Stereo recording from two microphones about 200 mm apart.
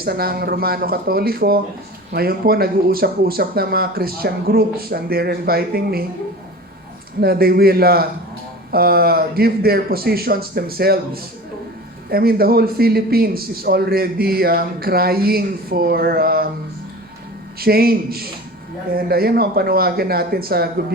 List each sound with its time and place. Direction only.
0.0 s a man's voice: 50° right (ahead or behind)
7.2 s a man's voice: 50° right (ahead or behind)
17.6 s a man's voice: 50° right (ahead or behind)